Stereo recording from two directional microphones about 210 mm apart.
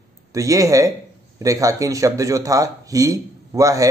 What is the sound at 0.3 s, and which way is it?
A man's voice, 15° right (ahead or behind).